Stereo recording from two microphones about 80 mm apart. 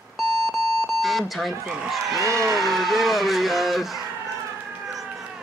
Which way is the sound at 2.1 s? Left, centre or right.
Right.